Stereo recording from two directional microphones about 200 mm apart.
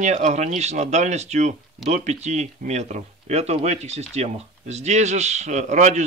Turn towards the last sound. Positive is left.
turn(degrees=-35)  # may be behind; listen again after turning